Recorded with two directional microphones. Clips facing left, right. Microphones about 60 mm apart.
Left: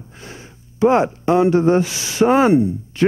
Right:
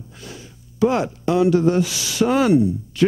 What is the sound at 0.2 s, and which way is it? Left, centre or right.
Speech, left.